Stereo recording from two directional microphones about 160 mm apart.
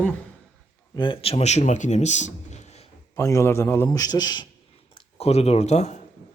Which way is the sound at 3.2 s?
20° left (ahead or behind).